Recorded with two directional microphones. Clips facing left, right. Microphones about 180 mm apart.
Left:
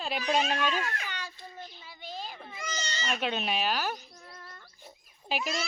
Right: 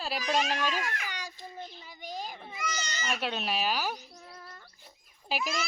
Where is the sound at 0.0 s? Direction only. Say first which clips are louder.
Left 1 dB; 5° right (ahead or behind).